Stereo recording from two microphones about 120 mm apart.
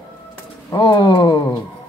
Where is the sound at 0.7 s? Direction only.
45° left (ahead or behind).